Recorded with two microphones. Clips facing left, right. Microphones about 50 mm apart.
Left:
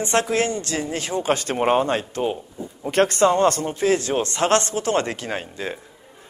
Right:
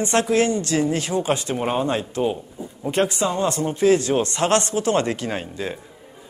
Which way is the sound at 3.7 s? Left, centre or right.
Left.